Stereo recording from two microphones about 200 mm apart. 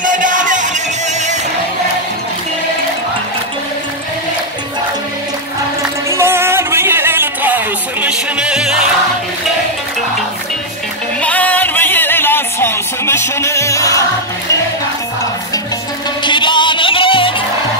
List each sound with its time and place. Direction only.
0.0 s music: 40° right (ahead or behind)
6.1 s music: 10° right (ahead or behind)
11.1 s music: 5° left (ahead or behind)
16.3 s music: 25° left (ahead or behind)